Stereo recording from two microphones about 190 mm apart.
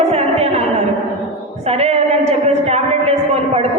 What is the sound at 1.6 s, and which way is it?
A woman's voice, 35° right (ahead or behind).